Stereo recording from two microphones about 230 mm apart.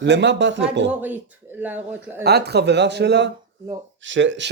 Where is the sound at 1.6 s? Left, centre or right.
Centre.